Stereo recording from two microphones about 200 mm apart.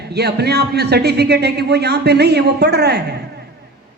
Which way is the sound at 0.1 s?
55° right (ahead or behind).